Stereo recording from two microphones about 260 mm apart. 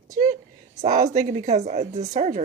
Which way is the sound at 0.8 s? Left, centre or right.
Right.